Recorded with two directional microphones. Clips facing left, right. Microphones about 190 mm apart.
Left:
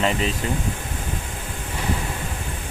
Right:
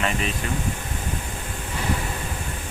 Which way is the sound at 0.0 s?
25° left (ahead or behind).